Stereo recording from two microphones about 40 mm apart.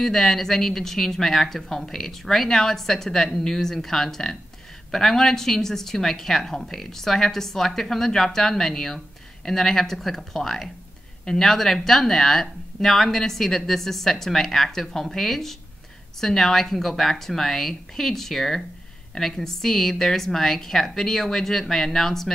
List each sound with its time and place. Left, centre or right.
0.0 s speech: centre